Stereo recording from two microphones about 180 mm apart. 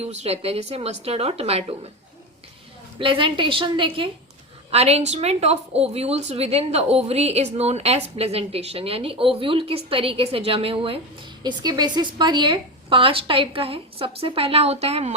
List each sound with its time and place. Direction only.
0.0 s a woman's voice: 35° right (ahead or behind)
3.0 s a woman's voice: 30° right (ahead or behind)